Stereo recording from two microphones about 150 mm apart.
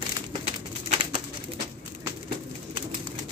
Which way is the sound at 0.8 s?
40° right (ahead or behind).